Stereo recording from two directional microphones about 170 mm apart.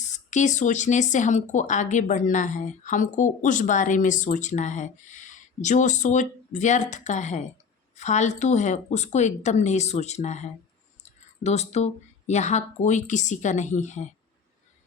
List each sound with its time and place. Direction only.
0.0 s speech: 45° left (ahead or behind)